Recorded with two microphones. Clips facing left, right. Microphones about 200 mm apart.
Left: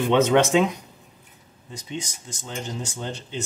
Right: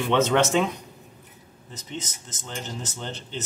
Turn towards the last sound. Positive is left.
turn(degrees=10)  # may be behind; listen again after turning